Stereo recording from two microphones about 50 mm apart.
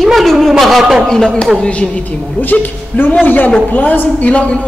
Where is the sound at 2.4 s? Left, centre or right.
Left.